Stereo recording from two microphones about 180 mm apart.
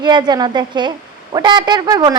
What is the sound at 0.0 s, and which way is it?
A woman's voice, 25° right (ahead or behind).